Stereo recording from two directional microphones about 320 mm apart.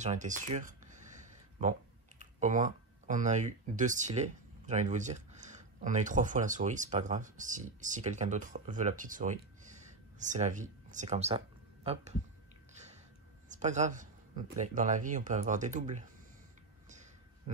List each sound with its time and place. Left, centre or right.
0.0 s speech: right
12.7 s a sound: right
14.6 s speech: right